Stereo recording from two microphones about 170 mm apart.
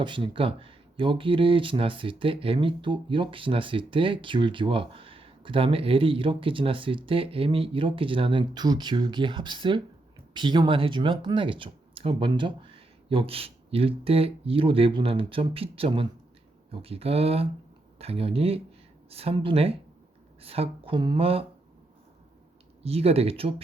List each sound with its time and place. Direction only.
0.0 s speech: 30° right (ahead or behind)
22.8 s speech: 35° right (ahead or behind)